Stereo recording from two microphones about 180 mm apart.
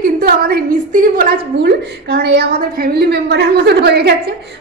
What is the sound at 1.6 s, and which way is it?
A woman's voice, 70° right (ahead or behind).